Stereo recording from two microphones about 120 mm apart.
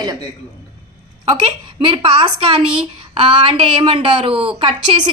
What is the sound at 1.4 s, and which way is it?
A woman's voice, 45° right (ahead or behind).